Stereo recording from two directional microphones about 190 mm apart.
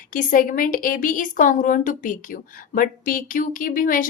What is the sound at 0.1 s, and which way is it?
A woman's voice, 45° left (ahead or behind).